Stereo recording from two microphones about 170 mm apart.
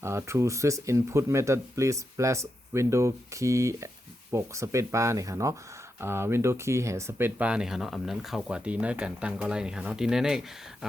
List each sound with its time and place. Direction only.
0.0 s speech: 15° right (ahead or behind)